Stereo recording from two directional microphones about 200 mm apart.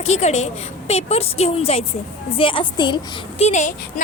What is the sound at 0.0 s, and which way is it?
A woman's voice, 35° left (ahead or behind).